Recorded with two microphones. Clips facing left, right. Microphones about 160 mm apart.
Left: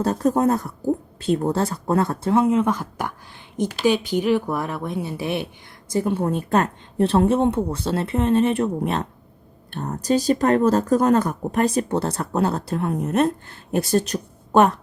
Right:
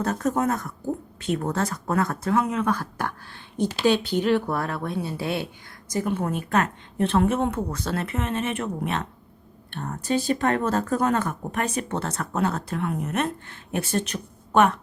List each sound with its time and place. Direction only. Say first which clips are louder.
0.0 s speech: left 5 dB; 30° left (ahead or behind)